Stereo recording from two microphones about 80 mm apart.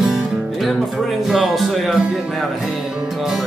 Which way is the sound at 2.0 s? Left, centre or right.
Centre.